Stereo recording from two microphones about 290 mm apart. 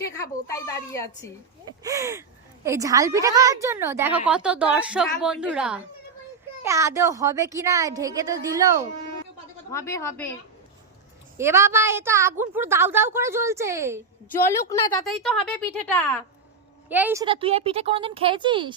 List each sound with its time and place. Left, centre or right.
0.0 s speech: centre
1.8 s a woman's voice: centre
9.7 s speech: centre
11.3 s a woman's voice: centre
14.3 s a woman's voice: centre
16.9 s a woman's voice: centre